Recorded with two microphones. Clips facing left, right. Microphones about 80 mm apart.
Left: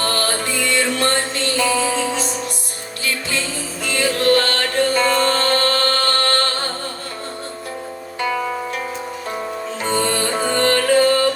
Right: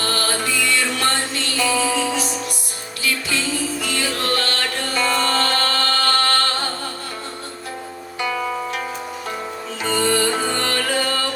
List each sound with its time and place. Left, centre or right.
0.0 s music: left
10.4 s music: left